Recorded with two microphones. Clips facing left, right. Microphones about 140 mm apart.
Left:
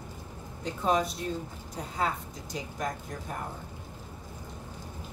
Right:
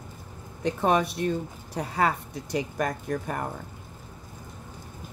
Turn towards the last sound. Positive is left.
turn(degrees=-70)  # may be behind; listen again after turning